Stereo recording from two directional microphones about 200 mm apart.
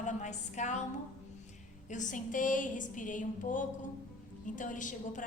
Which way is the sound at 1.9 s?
40° left (ahead or behind).